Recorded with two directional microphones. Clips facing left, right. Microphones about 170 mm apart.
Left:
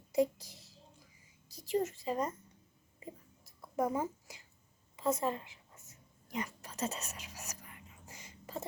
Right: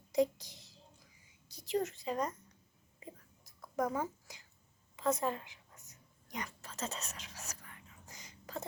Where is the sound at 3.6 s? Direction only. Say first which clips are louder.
Left 2 dB; 5° left (ahead or behind).